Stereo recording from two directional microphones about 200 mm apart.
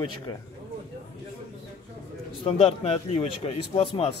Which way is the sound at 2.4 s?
30° left (ahead or behind).